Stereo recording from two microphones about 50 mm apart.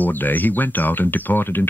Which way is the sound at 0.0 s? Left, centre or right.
Left.